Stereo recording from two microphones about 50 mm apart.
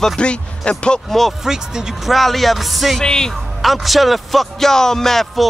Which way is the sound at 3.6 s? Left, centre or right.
Centre.